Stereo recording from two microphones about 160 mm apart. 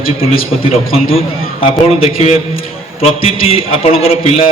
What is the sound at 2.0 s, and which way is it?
Speech, 45° left (ahead or behind).